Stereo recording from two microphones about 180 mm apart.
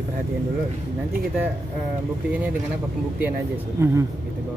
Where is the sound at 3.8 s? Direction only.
15° right (ahead or behind).